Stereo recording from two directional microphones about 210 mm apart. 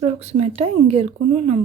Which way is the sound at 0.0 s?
30° right (ahead or behind).